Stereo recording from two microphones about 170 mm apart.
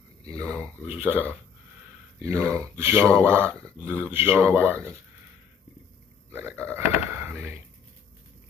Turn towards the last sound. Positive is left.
turn(degrees=-10)  # may be behind; listen again after turning